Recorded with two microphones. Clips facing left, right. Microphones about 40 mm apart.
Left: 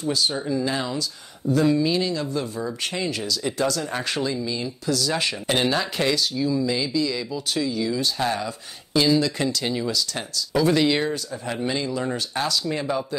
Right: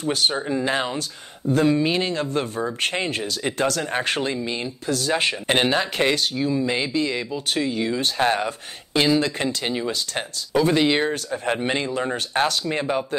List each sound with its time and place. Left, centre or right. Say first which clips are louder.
0.0 s speech: right 2 dB; right
10.5 s speech: right 1 dB; right
11.4 s speech: right 3 dB; right